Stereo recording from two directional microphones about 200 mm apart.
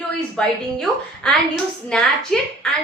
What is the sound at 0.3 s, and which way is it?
A woman's voice, 5° left (ahead or behind).